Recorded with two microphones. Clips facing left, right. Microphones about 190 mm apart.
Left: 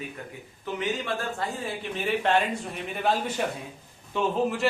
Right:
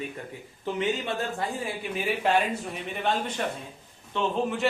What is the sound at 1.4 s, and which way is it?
A man's voice, 10° right (ahead or behind).